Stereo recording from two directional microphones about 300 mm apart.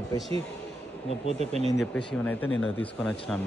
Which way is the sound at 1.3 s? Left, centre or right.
Right.